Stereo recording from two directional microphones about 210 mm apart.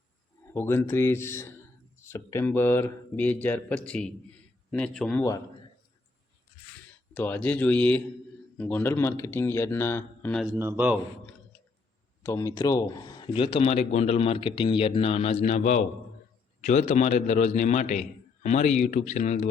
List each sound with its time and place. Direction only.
0.5 s speech: 10° left (ahead or behind)
7.1 s speech: 10° left (ahead or behind)
10.6 s a man's voice: 10° right (ahead or behind)
12.2 s a man's voice: 15° left (ahead or behind); by 19.5 s 35° left (ahead or behind)